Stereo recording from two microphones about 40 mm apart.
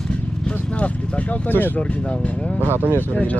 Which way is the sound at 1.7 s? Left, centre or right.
Left.